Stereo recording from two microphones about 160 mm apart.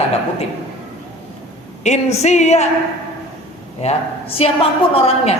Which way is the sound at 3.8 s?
40° left (ahead or behind).